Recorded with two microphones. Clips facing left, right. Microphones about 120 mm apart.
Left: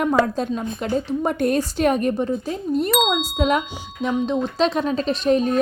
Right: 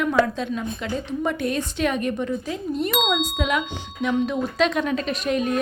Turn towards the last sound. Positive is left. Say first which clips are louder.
# left 5 dB
turn(degrees=35)  # may be behind; listen again after turning